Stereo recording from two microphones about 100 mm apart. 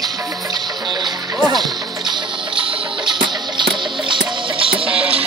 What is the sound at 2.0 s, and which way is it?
Music, 55° right (ahead or behind).